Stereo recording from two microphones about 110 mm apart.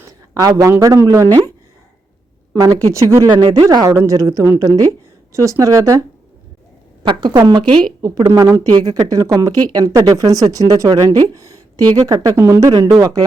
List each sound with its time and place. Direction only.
0.0 s a sound: 30° right (ahead or behind)
0.7 s speech: 25° right (ahead or behind)
2.5 s speech: 30° right (ahead or behind)
3.2 s speech: 40° right (ahead or behind)
3.8 s speech: 25° right (ahead or behind)
7.0 s speech: 45° right (ahead or behind)
8.0 s speech: 30° right (ahead or behind)
8.5 s speech: 40° right (ahead or behind)